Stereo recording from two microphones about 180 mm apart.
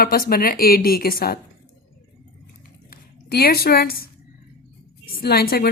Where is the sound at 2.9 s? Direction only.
60° left (ahead or behind).